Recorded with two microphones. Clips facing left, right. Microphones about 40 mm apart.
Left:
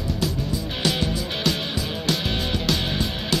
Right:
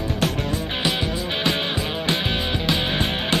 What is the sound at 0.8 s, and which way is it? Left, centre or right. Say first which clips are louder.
Music: left 1 dB; right.